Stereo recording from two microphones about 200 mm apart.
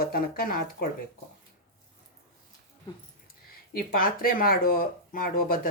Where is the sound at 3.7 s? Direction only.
45° left (ahead or behind).